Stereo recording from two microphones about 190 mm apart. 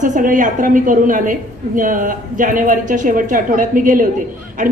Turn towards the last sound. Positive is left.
turn(degrees=-40)  # may be behind; listen again after turning